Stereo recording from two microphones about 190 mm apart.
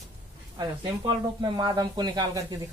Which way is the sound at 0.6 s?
25° right (ahead or behind).